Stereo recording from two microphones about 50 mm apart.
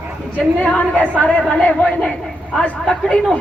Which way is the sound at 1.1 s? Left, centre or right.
Left.